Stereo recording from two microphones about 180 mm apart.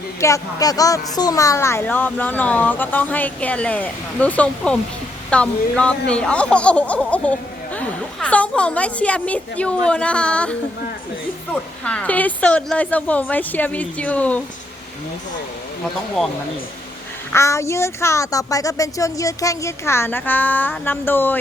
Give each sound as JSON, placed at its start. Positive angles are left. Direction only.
{"t": 0.2, "sound": "speech", "side_deg": 15}
{"t": 16.2, "sound": "speech", "side_deg": 0}
{"t": 17.3, "sound": "speech", "side_deg": 15}